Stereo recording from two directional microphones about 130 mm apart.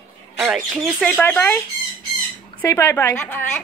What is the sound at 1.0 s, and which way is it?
Speech, 10° left (ahead or behind).